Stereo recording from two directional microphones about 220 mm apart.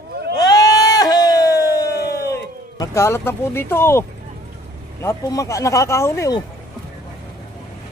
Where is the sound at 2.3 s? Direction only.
15° left (ahead or behind).